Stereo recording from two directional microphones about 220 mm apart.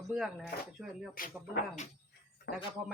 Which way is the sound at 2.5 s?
45° left (ahead or behind).